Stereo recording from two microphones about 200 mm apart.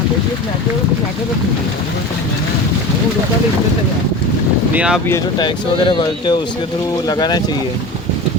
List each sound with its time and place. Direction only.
4.7 s speech: 5° right (ahead or behind)
5.0 s speech: 15° left (ahead or behind)